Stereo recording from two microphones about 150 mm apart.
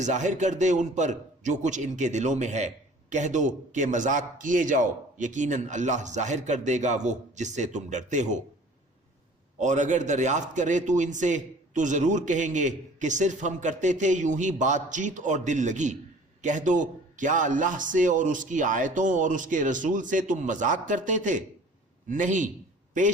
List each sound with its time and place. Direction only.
0.0 s a man's voice: 55° right (ahead or behind)
9.6 s a man's voice: 55° right (ahead or behind)